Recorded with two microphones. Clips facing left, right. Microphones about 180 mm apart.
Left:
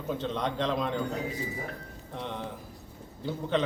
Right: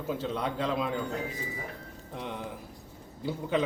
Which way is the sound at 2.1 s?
10° right (ahead or behind).